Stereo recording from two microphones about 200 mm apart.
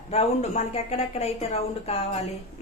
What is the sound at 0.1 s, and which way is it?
A woman's voice, 30° left (ahead or behind).